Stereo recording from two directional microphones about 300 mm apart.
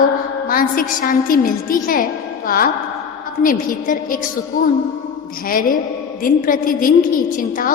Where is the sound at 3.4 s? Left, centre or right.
Left.